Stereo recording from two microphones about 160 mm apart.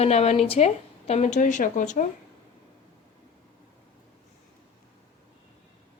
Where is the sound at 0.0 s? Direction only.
40° left (ahead or behind).